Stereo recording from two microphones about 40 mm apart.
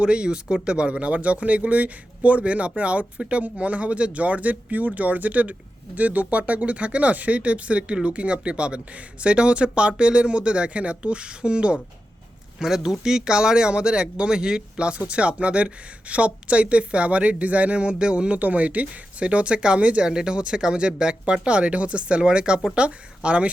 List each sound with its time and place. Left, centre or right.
0.0 s speech: right
12.6 s speech: centre; by 23.5 s right